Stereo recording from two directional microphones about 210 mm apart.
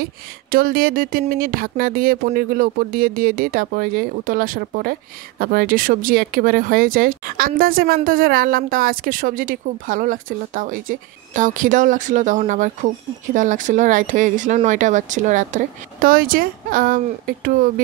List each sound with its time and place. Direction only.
0.0 s speech: 45° right (ahead or behind)